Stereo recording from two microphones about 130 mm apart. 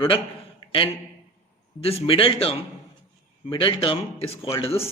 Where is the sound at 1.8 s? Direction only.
45° left (ahead or behind).